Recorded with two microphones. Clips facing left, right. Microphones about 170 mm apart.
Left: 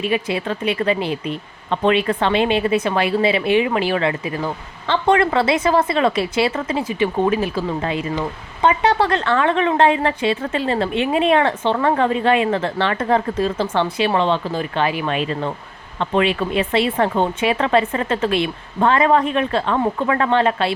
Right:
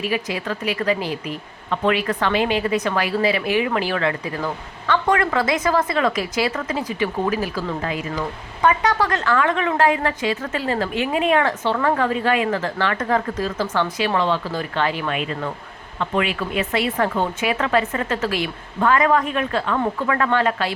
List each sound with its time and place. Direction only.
0.0 s a woman's voice: 25° left (ahead or behind)
15.1 s a woman's voice: 30° left (ahead or behind)